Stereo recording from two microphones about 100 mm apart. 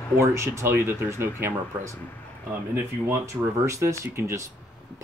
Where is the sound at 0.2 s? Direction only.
30° right (ahead or behind).